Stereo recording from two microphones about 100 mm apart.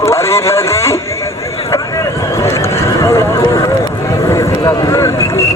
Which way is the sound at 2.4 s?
25° left (ahead or behind).